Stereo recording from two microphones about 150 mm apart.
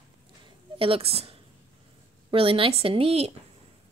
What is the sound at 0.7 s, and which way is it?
Speech, 40° right (ahead or behind).